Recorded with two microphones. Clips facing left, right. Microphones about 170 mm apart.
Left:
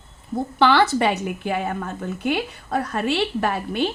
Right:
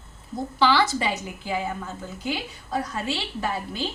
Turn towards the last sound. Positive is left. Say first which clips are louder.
# left 6 dB
turn(degrees=65)  # may be behind; listen again after turning